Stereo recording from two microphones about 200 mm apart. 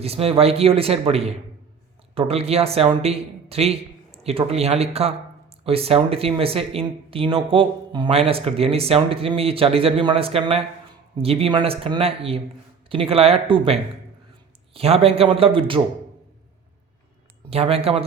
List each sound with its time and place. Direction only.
0.0 s a man's voice: 30° right (ahead or behind)
17.5 s speech: 30° right (ahead or behind)